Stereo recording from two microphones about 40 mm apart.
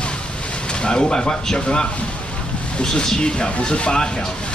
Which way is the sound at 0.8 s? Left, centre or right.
Left.